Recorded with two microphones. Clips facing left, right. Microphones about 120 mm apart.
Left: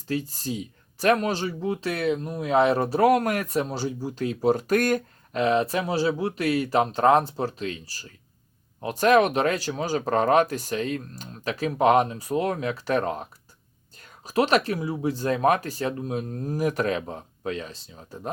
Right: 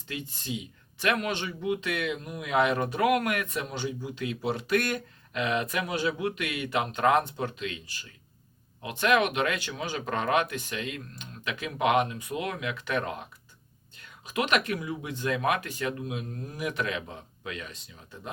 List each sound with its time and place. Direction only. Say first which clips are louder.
0.1 s speech: left 7 dB; 40° left (ahead or behind)